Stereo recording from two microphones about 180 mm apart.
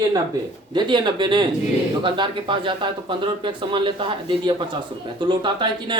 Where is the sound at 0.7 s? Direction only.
25° right (ahead or behind).